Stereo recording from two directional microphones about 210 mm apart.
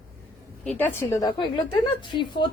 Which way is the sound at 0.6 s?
5° left (ahead or behind).